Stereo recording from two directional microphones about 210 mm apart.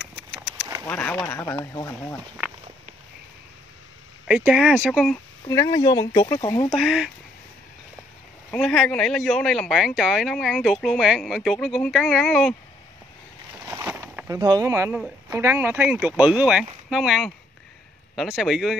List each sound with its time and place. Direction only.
0.6 s a sound: 15° right (ahead or behind)
0.8 s speech: 5° left (ahead or behind)
2.4 s speech: 10° right (ahead or behind)
4.3 s speech: 5° right (ahead or behind)
5.5 s speech: 15° left (ahead or behind)
6.7 s speech: centre (ahead or behind)
8.5 s speech: centre (ahead or behind)
13.7 s a sound: 10° right (ahead or behind)
15.2 s speech: 10° right (ahead or behind)